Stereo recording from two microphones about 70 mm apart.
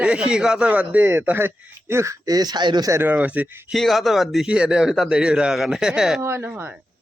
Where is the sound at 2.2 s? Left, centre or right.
Right.